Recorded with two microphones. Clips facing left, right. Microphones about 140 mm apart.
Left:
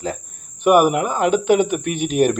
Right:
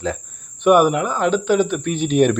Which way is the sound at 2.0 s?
45° left (ahead or behind).